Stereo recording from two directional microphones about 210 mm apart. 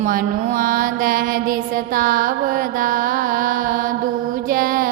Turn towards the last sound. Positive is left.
turn(degrees=-40)  # may be behind; listen again after turning